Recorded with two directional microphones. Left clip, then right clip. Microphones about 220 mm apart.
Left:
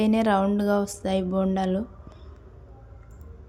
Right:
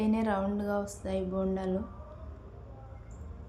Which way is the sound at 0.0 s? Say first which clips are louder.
Left 8 dB; 40° left (ahead or behind).